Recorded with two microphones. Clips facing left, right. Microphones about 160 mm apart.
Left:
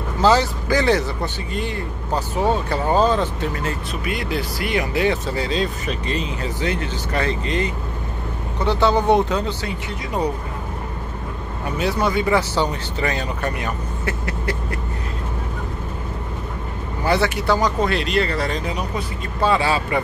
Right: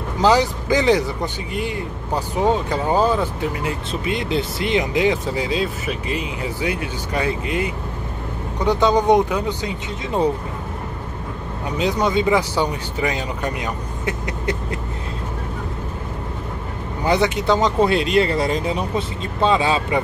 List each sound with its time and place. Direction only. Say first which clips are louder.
0.2 s speech: right 1 dB; 15° right (ahead or behind)
3.9 s speech: right 5 dB; 25° right (ahead or behind)
11.8 s speech: right 2 dB; 20° right (ahead or behind)
17.0 s speech: right 1 dB; 15° right (ahead or behind)